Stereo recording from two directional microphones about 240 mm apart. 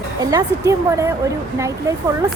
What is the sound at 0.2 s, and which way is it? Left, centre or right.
A woman's voice, centre.